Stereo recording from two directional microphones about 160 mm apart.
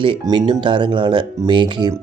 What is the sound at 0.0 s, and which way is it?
Speech, 30° right (ahead or behind).